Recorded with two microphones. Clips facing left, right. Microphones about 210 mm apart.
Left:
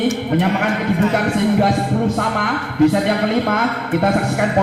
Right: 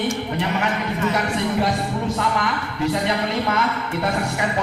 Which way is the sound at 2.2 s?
55° left (ahead or behind).